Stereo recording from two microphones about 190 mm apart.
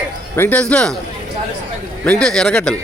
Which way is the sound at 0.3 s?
10° left (ahead or behind).